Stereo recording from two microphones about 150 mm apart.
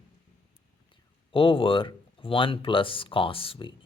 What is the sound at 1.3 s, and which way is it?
Speech, 35° left (ahead or behind).